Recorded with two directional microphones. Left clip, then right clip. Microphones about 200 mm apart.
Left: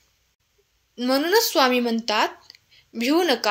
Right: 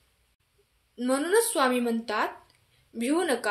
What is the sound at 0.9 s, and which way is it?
A woman's voice, 35° left (ahead or behind).